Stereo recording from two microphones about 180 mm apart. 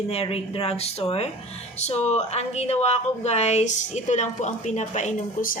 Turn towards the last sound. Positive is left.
turn(degrees=45)  # may be behind; listen again after turning